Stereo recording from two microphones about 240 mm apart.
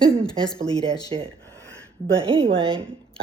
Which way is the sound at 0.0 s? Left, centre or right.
Right.